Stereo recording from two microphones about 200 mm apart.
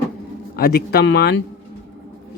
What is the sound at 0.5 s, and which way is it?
Speech, 50° left (ahead or behind).